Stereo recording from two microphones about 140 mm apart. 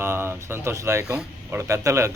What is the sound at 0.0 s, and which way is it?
A man's voice, 15° right (ahead or behind).